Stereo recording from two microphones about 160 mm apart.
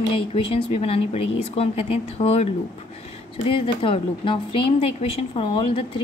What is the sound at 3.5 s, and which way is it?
Speech, 35° left (ahead or behind).